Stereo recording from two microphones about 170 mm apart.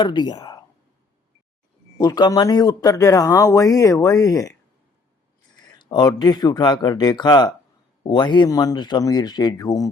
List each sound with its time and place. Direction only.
0.0 s speech: 25° left (ahead or behind)
2.0 s speech: 20° left (ahead or behind)
5.8 s speech: 25° left (ahead or behind)